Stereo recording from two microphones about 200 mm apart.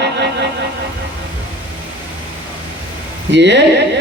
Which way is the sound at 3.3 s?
60° right (ahead or behind).